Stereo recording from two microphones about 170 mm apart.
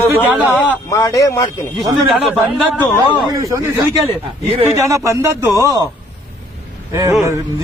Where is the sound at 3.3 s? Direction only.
20° right (ahead or behind).